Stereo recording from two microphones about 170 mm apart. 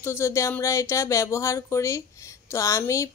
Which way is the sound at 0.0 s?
15° left (ahead or behind).